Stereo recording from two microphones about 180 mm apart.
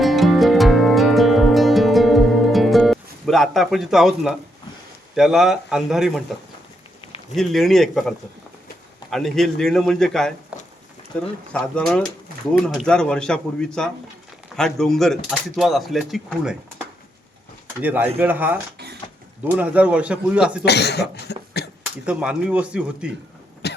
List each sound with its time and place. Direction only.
0.0 s music: centre (ahead or behind)
5.1 s speech: centre (ahead or behind)
7.3 s speech: centre (ahead or behind)
17.8 s a man's voice: 10° right (ahead or behind)
20.7 s speech: 70° left (ahead or behind)
21.6 s a sound: 65° left (ahead or behind)
22.0 s speech: 5° right (ahead or behind)
23.6 s cough: 65° left (ahead or behind)